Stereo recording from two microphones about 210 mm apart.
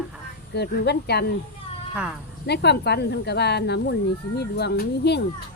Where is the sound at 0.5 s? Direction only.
50° left (ahead or behind).